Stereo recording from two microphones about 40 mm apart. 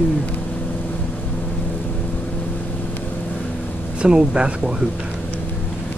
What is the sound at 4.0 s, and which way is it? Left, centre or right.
Speech, right.